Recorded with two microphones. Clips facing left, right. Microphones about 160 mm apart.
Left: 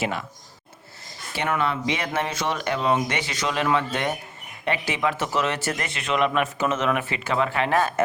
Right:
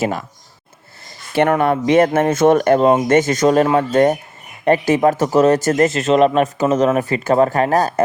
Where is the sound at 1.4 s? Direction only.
50° right (ahead or behind).